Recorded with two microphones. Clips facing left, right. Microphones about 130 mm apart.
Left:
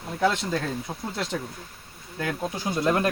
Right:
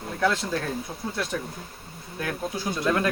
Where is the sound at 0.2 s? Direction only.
20° left (ahead or behind).